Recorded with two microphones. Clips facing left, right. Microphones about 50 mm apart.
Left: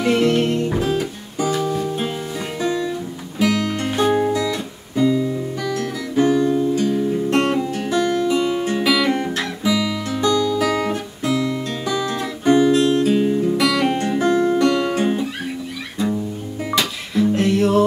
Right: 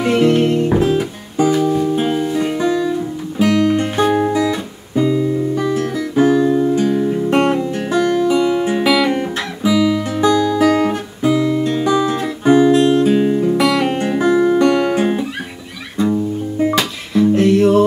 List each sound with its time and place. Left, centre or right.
0.1 s music: centre
1.6 s music: centre
3.3 s guitar: centre
6.8 s music: right
7.3 s music: centre
8.5 s guitar: centre
12.8 s music: right
17.1 s music: centre